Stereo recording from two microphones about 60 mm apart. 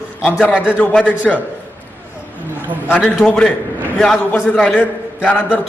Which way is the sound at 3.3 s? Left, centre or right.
Centre.